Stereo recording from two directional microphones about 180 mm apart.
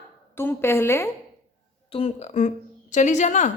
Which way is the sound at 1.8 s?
30° left (ahead or behind).